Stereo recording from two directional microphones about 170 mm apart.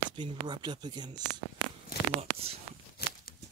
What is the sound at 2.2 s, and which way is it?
Speech, 35° right (ahead or behind).